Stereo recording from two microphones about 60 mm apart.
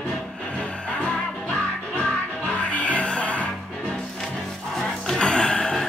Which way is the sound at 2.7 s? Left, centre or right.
Left.